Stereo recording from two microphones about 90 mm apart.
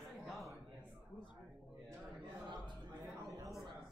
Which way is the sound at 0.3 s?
Centre (ahead or behind).